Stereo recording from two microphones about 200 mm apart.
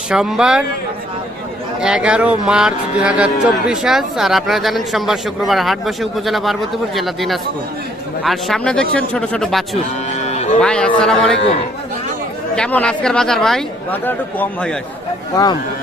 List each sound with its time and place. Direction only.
0.1 s speech: 5° right (ahead or behind)
1.8 s speech: 5° right (ahead or behind)
10.2 s music: 35° left (ahead or behind)
10.6 s speech: 5° left (ahead or behind)
12.5 s speech: 5° left (ahead or behind)